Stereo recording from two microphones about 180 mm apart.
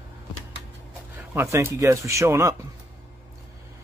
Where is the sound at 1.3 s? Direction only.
15° right (ahead or behind).